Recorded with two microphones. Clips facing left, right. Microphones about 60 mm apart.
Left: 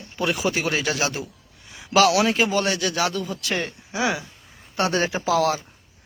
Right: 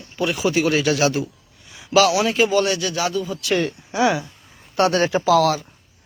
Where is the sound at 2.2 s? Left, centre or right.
Left.